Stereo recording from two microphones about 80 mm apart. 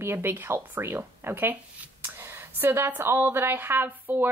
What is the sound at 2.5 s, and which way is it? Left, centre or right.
Speech, right.